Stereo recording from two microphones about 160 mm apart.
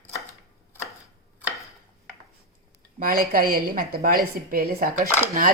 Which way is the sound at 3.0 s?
65° right (ahead or behind).